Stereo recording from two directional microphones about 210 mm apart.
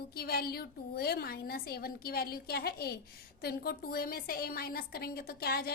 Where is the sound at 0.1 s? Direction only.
45° left (ahead or behind).